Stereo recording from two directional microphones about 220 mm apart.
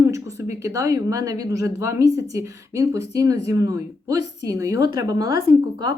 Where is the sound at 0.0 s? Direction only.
15° right (ahead or behind).